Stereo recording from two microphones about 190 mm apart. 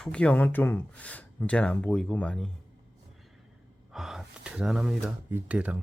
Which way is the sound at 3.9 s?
Centre (ahead or behind).